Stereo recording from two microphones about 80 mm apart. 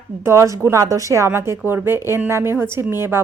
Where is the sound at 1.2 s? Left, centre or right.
Right.